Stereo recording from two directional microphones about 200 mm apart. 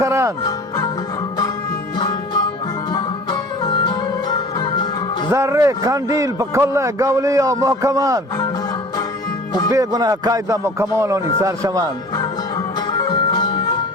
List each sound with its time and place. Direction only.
0.0 s a man's voice: 15° right (ahead or behind)
2.0 s music: 20° left (ahead or behind)
5.3 s a man's voice: 15° right (ahead or behind)
9.7 s a man's voice: 20° right (ahead or behind)
12.9 s music: 20° left (ahead or behind)